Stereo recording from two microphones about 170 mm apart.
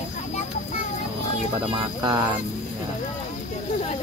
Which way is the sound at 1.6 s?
25° right (ahead or behind).